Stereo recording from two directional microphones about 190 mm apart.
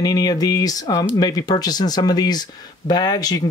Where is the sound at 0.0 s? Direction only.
20° left (ahead or behind).